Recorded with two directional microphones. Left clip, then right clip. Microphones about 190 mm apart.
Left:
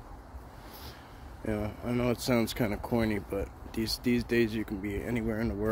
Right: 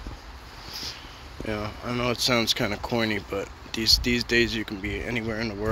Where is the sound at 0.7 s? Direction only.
20° left (ahead or behind).